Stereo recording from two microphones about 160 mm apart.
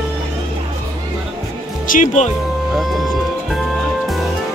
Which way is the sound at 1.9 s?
50° left (ahead or behind).